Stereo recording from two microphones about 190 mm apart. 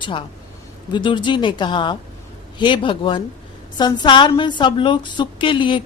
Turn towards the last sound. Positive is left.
turn(degrees=25)  # may be behind; listen again after turning